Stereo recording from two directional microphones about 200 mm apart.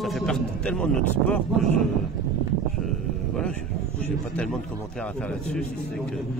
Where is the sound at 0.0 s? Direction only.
Centre (ahead or behind).